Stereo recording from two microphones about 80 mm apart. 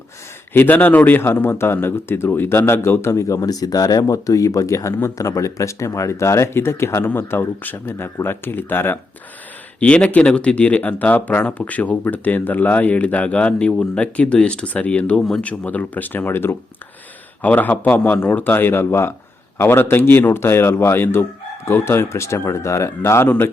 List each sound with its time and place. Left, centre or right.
0.5 s a man's voice: left
9.8 s a man's voice: centre; by 23.3 s left